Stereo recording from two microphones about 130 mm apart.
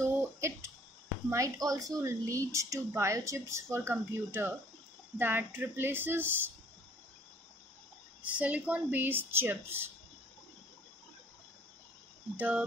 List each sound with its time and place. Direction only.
0.0 s a sound: 20° right (ahead or behind)
1.3 s a woman's voice: 25° right (ahead or behind)
8.2 s speech: 10° right (ahead or behind)
12.4 s speech: 15° right (ahead or behind)